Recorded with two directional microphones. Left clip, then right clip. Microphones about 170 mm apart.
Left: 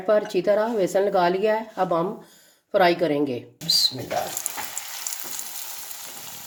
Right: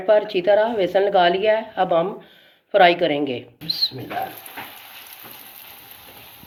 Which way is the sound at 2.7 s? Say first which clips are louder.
Right 4 dB; 60° left (ahead or behind).